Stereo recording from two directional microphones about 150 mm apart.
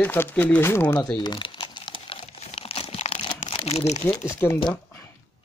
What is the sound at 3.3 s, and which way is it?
Crumpling, 30° left (ahead or behind).